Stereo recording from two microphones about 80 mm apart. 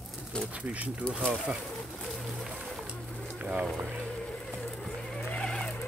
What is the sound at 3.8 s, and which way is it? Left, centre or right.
Speech, right.